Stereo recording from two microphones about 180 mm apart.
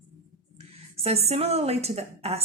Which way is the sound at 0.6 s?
35° right (ahead or behind).